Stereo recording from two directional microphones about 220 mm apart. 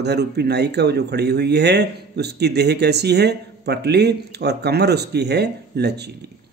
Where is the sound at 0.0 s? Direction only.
50° right (ahead or behind).